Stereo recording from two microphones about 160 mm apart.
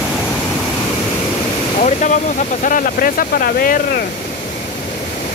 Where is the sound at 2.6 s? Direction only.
60° left (ahead or behind).